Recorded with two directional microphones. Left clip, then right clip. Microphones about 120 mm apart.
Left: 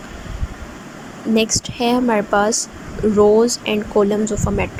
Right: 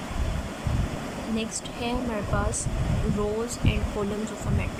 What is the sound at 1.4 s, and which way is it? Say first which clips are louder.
Speech: left 17 dB; 70° left (ahead or behind).